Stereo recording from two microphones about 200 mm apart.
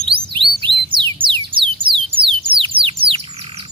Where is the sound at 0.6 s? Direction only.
25° right (ahead or behind).